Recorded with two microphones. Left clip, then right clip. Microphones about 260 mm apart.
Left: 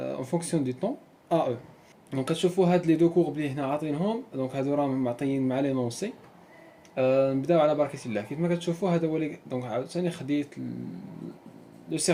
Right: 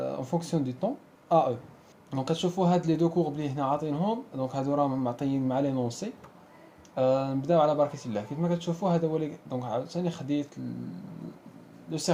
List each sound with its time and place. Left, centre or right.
0.0 s speech: right
6.9 s speech: right
11.9 s speech: right